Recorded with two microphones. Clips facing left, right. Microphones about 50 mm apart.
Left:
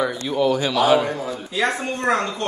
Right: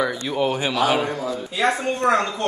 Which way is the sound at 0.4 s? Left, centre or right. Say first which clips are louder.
Left 3 dB; right.